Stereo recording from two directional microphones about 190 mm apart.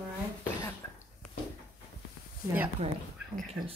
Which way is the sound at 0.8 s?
15° left (ahead or behind).